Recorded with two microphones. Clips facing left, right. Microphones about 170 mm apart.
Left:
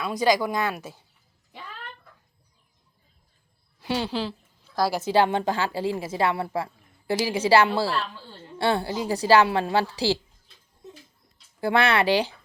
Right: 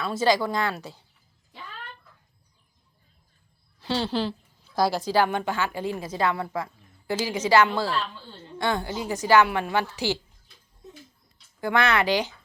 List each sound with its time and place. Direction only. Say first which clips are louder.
0.0 s speech: even; 15° left (ahead or behind)
3.8 s a sound: right 1 dB; 15° left (ahead or behind)
5.0 s a woman's voice: left 2 dB; 25° left (ahead or behind)
11.6 s a woman's voice: left 2 dB; 30° left (ahead or behind)